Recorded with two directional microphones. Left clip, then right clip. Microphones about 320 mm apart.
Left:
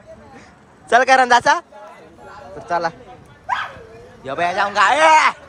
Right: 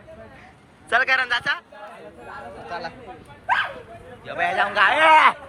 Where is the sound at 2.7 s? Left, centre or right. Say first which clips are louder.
Left 12 dB; left.